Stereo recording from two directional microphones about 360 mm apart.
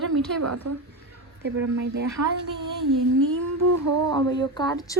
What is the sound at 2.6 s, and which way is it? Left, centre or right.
Humming, right.